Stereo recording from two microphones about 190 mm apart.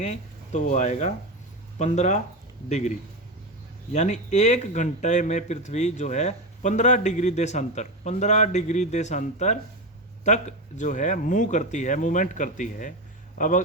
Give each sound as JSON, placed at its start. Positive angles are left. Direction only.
{"t": 0.0, "sound": "speech", "side_deg": 40}
{"t": 3.9, "sound": "speech", "side_deg": 40}